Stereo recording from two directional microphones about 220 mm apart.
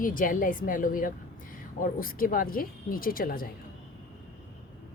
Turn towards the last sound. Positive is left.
turn(degrees=40)  # may be behind; listen again after turning